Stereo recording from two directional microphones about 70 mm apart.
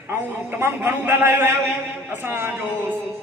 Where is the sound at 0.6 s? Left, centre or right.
Right.